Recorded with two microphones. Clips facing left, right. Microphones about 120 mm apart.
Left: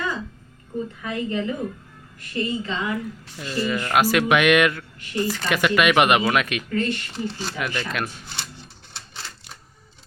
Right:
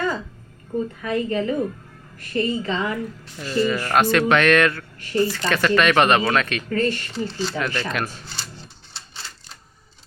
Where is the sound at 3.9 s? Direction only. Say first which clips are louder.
Right 1 dB; 10° left (ahead or behind).